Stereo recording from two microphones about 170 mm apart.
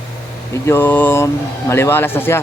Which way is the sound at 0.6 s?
15° left (ahead or behind).